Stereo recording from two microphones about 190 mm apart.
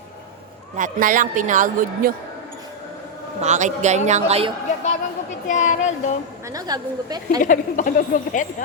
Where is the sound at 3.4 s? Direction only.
40° right (ahead or behind).